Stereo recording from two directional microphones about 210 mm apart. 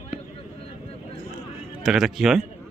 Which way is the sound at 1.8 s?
Centre (ahead or behind).